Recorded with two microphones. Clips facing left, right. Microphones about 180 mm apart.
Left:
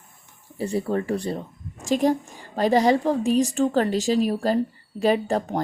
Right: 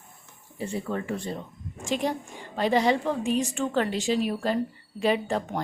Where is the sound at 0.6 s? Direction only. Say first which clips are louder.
Left 6 dB; 35° left (ahead or behind).